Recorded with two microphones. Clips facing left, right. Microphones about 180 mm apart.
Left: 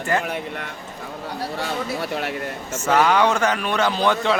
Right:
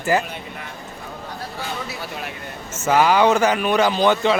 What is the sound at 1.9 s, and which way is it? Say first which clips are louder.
Speech: left 6 dB; 65° left (ahead or behind).